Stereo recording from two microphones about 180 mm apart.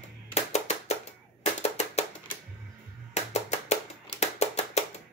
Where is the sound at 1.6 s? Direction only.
35° left (ahead or behind).